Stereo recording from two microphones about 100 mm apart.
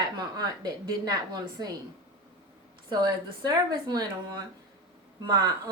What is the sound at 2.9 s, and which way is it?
A woman's voice, 45° right (ahead or behind).